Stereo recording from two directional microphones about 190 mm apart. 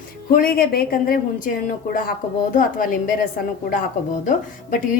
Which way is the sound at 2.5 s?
45° left (ahead or behind).